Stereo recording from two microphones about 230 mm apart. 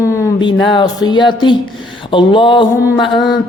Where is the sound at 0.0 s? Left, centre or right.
Centre.